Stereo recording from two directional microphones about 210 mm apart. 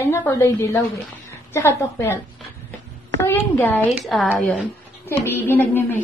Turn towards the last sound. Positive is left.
turn(degrees=10)  # may be behind; listen again after turning